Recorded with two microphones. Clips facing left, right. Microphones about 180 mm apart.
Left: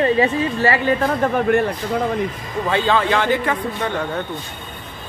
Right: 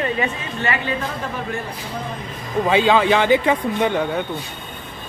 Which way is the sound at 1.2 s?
60° left (ahead or behind).